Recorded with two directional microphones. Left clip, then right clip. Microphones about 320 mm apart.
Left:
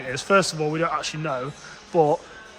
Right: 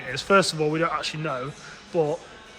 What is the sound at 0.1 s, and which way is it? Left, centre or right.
Speech, centre.